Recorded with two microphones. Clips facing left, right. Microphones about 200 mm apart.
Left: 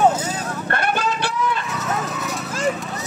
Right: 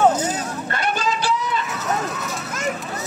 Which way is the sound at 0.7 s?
60° left (ahead or behind).